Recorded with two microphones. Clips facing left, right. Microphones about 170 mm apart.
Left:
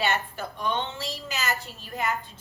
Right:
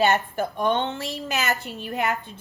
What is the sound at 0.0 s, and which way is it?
A woman's voice, 45° right (ahead or behind).